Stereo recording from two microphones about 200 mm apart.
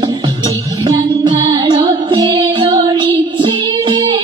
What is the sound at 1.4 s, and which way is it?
Music, 20° right (ahead or behind).